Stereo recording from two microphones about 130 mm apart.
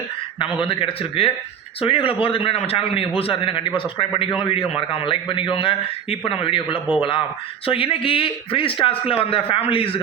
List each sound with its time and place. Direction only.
0.6 s a man's voice: 45° left (ahead or behind)